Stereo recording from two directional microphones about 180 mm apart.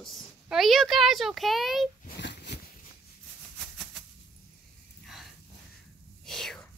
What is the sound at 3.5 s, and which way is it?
Maraca, centre (ahead or behind).